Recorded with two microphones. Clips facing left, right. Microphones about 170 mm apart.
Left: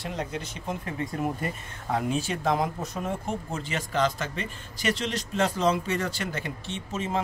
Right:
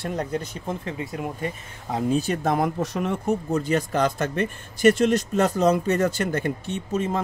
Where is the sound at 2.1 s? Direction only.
40° right (ahead or behind).